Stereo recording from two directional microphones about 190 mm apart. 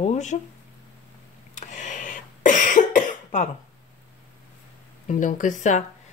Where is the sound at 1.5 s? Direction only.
40° left (ahead or behind).